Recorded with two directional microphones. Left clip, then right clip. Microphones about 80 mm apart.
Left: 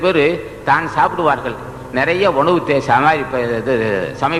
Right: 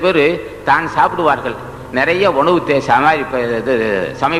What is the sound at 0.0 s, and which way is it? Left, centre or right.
A man's voice, right.